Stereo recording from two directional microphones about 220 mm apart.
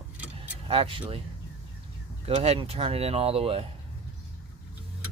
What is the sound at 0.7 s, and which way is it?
Speech, 25° right (ahead or behind).